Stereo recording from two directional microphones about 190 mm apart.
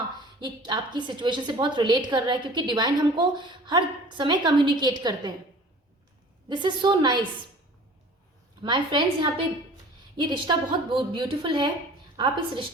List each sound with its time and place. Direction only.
0.4 s a woman's voice: 25° right (ahead or behind)
6.5 s a woman's voice: 25° right (ahead or behind)
8.6 s a woman's voice: 25° right (ahead or behind)